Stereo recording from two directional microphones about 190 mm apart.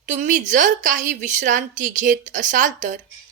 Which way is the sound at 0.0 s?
40° right (ahead or behind).